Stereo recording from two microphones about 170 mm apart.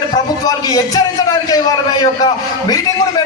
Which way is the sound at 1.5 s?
20° left (ahead or behind).